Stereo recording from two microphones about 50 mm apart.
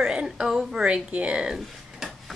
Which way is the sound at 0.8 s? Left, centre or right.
Right.